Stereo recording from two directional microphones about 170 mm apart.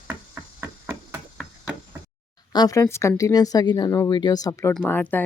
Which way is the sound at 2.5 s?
20° left (ahead or behind).